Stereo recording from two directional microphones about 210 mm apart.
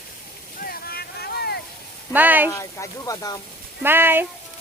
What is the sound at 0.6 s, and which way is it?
Boat, 45° left (ahead or behind).